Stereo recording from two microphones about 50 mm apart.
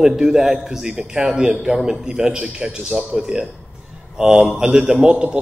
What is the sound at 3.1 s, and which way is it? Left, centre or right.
A man's voice, right.